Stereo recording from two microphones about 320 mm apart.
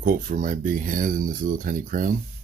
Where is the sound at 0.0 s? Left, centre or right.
Right.